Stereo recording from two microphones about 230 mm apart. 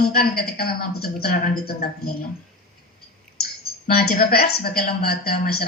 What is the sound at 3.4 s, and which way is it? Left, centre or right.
A woman's voice, left.